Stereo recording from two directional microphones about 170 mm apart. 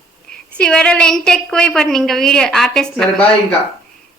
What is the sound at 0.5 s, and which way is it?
A woman's voice, 5° left (ahead or behind).